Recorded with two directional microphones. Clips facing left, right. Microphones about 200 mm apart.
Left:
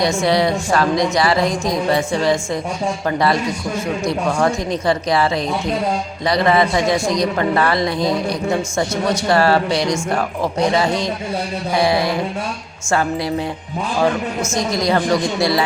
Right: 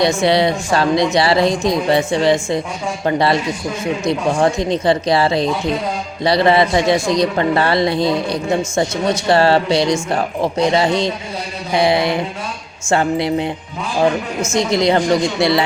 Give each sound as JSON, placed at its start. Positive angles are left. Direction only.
{"t": 0.2, "sound": "a man's voice", "side_deg": -25}
{"t": 14.5, "sound": "a man's voice", "side_deg": -25}